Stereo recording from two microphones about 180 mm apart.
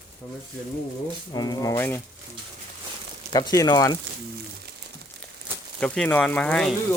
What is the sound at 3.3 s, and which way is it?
Speech, 20° left (ahead or behind).